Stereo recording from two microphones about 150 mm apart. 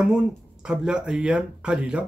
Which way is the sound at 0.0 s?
5° right (ahead or behind).